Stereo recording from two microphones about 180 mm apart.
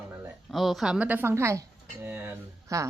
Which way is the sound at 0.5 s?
Centre (ahead or behind).